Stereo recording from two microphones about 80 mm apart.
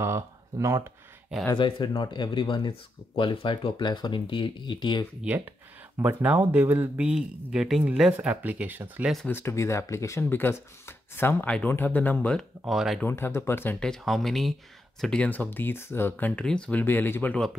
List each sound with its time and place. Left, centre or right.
0.0 s speech: right
1.6 s speech: left
3.2 s speech: left
6.0 s speech: right
7.1 s speech: centre
8.1 s speech: centre
9.3 s speech: left
11.4 s speech: centre
12.4 s speech: centre
13.0 s speech: left
13.7 s speech: centre
15.2 s speech: left
16.4 s speech: centre
16.8 s speech: left